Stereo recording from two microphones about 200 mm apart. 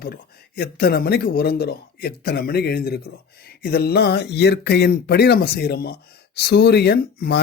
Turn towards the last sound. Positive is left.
turn(degrees=50)  # may be behind; listen again after turning